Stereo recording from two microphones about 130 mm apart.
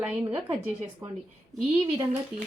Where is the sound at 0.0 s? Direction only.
10° right (ahead or behind).